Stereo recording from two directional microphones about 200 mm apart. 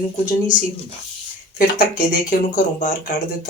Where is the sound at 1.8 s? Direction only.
45° left (ahead or behind).